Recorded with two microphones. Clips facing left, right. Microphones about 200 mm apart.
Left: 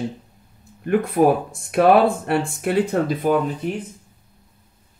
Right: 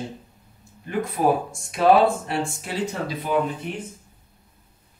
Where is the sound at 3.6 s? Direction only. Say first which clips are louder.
Left 6 dB; 40° left (ahead or behind).